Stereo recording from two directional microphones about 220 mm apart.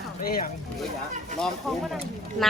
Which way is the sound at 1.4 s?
Centre (ahead or behind).